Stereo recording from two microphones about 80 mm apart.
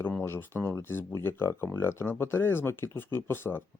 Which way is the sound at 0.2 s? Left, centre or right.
Left.